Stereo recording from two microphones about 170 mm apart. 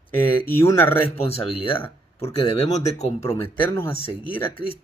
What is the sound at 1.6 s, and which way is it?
Speech, 35° left (ahead or behind).